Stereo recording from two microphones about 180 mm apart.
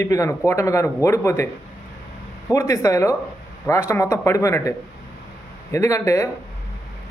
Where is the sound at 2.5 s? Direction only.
15° left (ahead or behind).